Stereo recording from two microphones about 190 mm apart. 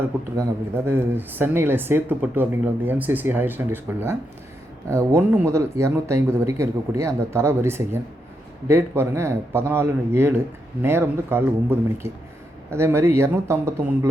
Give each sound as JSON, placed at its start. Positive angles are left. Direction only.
{"t": 0.9, "sound": "speech", "side_deg": -10}